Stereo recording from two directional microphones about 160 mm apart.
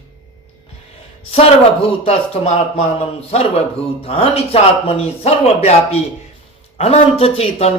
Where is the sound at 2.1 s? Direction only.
40° left (ahead or behind).